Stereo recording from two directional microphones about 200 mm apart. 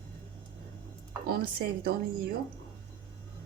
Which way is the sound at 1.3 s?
50° right (ahead or behind).